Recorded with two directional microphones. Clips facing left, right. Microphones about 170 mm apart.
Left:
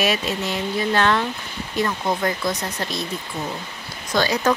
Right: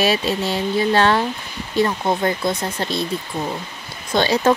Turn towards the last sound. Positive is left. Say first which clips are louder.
# right 3 dB
turn(degrees=-25)  # may be behind; listen again after turning